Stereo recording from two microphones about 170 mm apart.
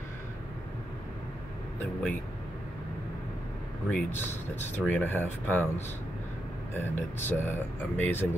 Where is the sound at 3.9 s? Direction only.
10° left (ahead or behind).